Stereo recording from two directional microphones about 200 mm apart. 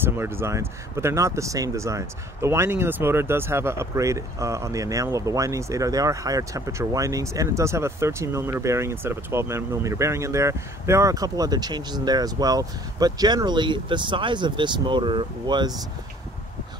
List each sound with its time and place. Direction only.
0.0 s speech: 10° right (ahead or behind)